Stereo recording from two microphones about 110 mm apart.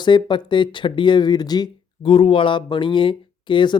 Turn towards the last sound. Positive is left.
turn(degrees=45)  # may be behind; listen again after turning